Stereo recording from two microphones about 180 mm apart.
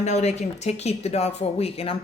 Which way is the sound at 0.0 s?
40° left (ahead or behind).